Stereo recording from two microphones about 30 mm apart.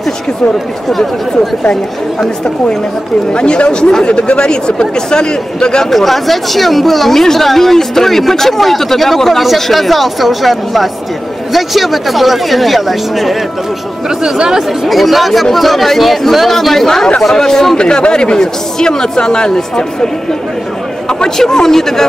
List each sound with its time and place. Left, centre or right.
0.8 s speech: centre
3.3 s a man's voice: left
5.9 s speech: centre
14.9 s speech: centre
17.7 s a man's voice: left
21.4 s speech: centre